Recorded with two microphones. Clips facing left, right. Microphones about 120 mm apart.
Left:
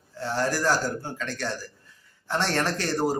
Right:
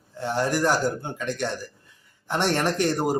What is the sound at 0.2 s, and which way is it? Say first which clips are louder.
Speech: right 3 dB; 15° right (ahead or behind).